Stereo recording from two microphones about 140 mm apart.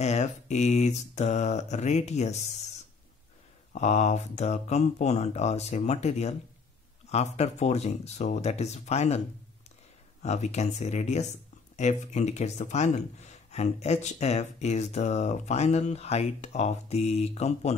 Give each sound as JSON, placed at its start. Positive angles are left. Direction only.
{"t": 0.0, "sound": "mantra", "side_deg": 55}
{"t": 3.7, "sound": "speech", "side_deg": 55}
{"t": 10.2, "sound": "speech", "side_deg": 55}